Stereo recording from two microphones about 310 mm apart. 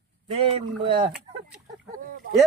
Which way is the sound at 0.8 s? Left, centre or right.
Centre.